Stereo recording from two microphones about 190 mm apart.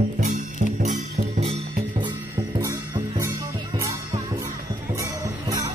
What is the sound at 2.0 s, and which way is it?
Music, 20° right (ahead or behind).